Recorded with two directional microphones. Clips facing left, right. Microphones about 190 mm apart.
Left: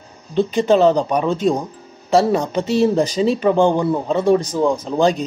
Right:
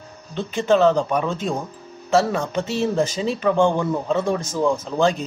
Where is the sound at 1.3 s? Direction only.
35° left (ahead or behind).